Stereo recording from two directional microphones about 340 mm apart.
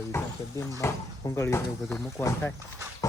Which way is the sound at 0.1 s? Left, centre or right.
Centre.